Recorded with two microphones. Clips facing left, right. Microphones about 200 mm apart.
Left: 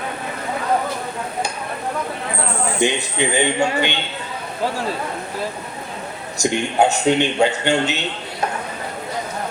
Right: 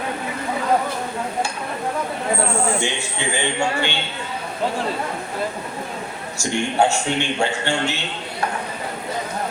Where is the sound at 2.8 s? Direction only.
20° left (ahead or behind).